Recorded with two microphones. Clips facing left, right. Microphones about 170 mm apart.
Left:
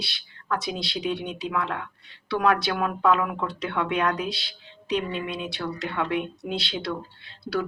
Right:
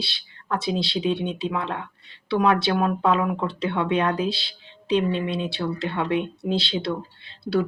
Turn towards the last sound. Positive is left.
turn(degrees=-25)  # may be behind; listen again after turning